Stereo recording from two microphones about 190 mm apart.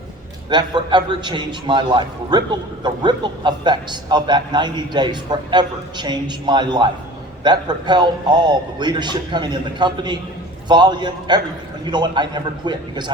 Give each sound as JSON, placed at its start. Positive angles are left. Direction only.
{"t": 0.5, "sound": "a man's voice", "side_deg": -25}